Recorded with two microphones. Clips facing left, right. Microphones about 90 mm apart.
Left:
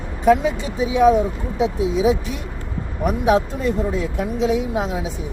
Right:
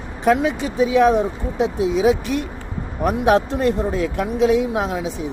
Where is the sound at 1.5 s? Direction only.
60° right (ahead or behind).